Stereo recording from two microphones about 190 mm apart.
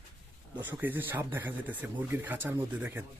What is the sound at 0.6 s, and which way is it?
Speech, 10° right (ahead or behind).